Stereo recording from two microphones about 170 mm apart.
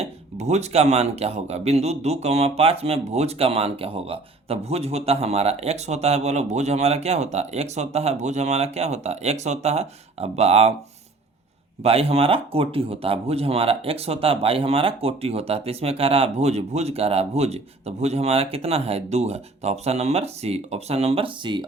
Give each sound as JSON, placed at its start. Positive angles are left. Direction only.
{"t": 0.0, "sound": "speech", "side_deg": -40}
{"t": 11.8, "sound": "speech", "side_deg": -35}